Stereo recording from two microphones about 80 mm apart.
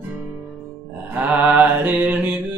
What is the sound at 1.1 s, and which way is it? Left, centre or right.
Mantra, centre.